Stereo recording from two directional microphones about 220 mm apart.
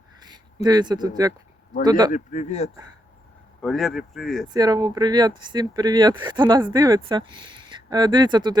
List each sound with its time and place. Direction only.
0.2 s a man's voice: 20° right (ahead or behind)
2.1 s speech: 35° left (ahead or behind)
3.6 s speech: centre (ahead or behind)
4.4 s speech: 15° right (ahead or behind)